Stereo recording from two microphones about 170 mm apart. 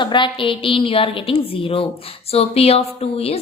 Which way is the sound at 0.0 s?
30° left (ahead or behind).